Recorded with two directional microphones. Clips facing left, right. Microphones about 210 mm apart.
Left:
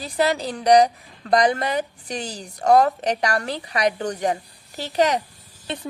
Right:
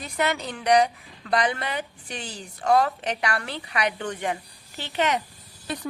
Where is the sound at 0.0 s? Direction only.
35° left (ahead or behind).